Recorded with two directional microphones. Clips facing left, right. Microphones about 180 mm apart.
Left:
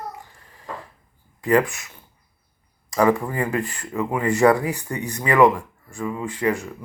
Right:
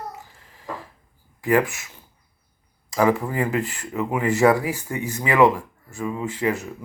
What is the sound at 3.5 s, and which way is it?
Speech, 20° right (ahead or behind).